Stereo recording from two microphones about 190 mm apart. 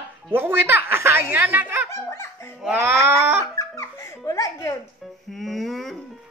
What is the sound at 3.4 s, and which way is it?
Music, 15° left (ahead or behind).